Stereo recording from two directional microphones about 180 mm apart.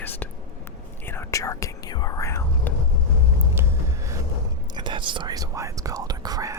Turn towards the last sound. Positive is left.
turn(degrees=-20)  # may be behind; listen again after turning